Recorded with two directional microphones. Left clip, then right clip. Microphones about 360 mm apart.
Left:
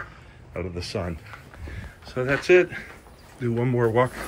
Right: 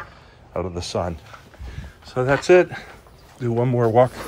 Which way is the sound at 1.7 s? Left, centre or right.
Centre.